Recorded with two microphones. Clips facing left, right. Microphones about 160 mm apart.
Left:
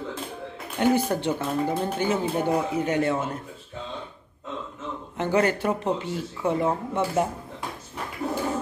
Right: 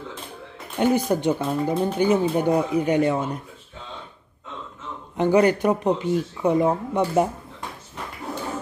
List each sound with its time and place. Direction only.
0.7 s speech: 15° right (ahead or behind)
5.1 s speech: 15° right (ahead or behind)